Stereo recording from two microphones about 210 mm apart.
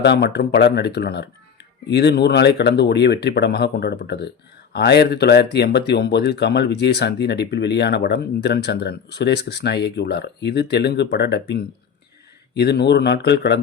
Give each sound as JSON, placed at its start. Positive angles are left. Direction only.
{"t": 0.0, "sound": "speech", "side_deg": 50}